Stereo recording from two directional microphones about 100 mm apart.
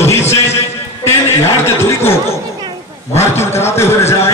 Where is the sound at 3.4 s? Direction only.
25° left (ahead or behind).